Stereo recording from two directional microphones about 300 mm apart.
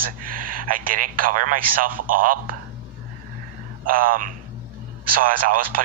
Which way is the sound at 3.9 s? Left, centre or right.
Right.